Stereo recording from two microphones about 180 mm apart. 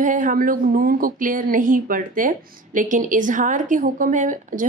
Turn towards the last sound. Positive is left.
turn(degrees=-45)  # may be behind; listen again after turning